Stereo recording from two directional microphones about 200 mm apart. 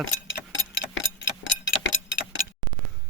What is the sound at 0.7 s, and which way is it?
Clock, 65° left (ahead or behind).